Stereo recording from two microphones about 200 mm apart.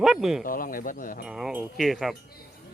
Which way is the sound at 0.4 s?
45° left (ahead or behind).